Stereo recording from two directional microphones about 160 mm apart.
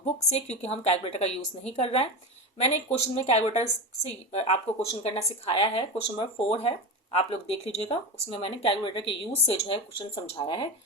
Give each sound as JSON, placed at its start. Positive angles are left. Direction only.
{"t": 0.0, "sound": "a woman's voice", "side_deg": 45}